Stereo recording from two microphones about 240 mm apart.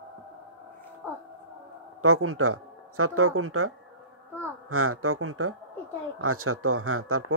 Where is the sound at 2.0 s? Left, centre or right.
Right.